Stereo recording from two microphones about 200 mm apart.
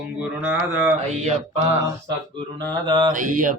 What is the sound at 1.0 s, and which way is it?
Mantra, 35° right (ahead or behind).